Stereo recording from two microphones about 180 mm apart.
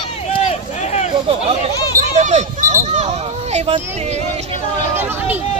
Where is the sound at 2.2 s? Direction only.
40° right (ahead or behind).